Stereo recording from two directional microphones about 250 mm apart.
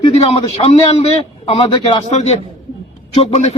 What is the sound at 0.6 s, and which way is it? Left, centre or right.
A man's voice, centre.